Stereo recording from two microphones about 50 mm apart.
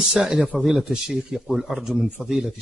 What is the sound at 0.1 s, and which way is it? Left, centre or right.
Speech, centre.